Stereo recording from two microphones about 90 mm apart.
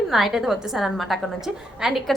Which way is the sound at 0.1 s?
Centre (ahead or behind).